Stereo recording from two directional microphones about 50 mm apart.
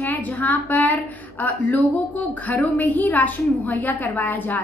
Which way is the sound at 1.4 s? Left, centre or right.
Left.